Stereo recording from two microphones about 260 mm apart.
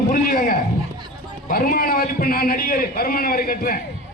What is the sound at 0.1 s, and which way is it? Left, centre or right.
A man's voice, left.